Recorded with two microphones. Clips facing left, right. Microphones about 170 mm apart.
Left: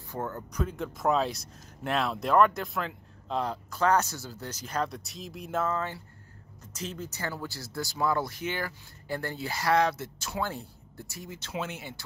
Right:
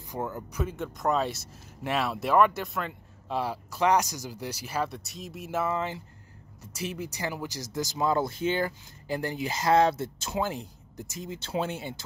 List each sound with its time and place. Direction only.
0.1 s speech: 10° right (ahead or behind); by 11.9 s 30° right (ahead or behind)